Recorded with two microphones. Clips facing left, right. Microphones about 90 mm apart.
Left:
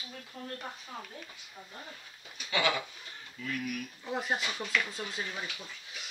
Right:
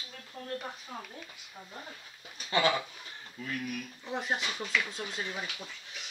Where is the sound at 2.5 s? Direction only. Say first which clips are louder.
Right 3 dB; 35° right (ahead or behind).